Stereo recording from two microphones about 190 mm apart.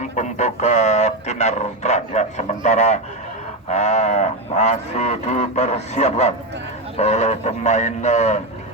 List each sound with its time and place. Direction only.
0.0 s a sound: 40° left (ahead or behind)
3.7 s livestock: 35° left (ahead or behind)
6.9 s a man's voice: 35° left (ahead or behind)